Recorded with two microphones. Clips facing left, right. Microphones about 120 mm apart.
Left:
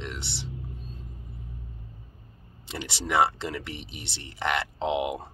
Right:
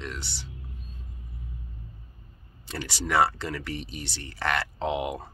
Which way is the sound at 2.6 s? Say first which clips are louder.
Right 1 dB; 20° left (ahead or behind).